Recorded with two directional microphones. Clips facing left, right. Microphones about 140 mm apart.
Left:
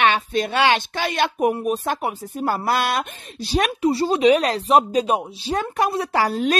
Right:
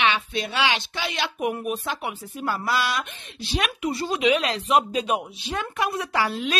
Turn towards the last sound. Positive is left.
turn(degrees=45)  # may be behind; listen again after turning